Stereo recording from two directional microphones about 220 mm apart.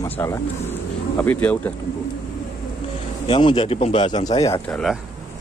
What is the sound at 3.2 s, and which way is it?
A man's voice, 25° left (ahead or behind).